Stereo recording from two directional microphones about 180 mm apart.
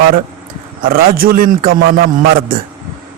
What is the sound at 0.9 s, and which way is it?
Speech, 55° right (ahead or behind).